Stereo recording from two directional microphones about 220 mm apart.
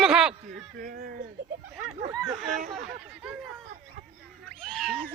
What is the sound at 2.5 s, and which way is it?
Speech, 35° right (ahead or behind).